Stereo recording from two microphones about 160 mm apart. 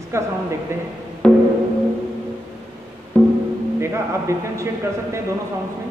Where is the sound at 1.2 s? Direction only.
5° left (ahead or behind).